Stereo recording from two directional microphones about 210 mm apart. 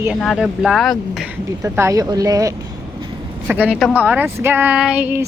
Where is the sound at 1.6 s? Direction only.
15° right (ahead or behind).